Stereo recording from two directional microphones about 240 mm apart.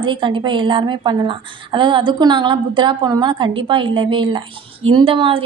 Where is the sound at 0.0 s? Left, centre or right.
Centre.